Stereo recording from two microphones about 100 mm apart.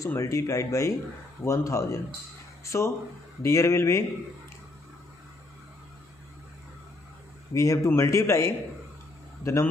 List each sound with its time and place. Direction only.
0.0 s a man's voice: 30° left (ahead or behind)
7.5 s a man's voice: 30° left (ahead or behind)